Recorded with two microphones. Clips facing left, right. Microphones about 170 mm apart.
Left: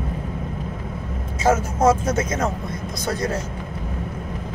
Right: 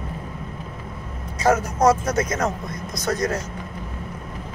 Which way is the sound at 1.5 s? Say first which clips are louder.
Even; 25° left (ahead or behind).